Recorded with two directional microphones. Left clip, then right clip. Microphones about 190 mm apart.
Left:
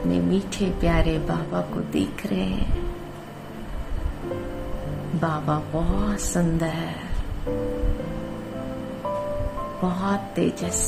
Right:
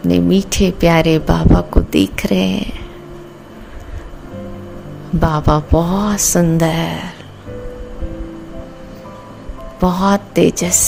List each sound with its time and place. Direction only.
0.1 s speech: 50° right (ahead or behind)
5.2 s speech: 50° right (ahead or behind)
9.8 s speech: 50° right (ahead or behind)